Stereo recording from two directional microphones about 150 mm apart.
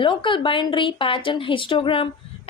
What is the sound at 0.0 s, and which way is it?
A woman's voice, 35° left (ahead or behind).